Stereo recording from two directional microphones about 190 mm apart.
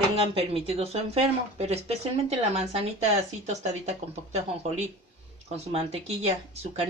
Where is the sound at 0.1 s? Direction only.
30° right (ahead or behind).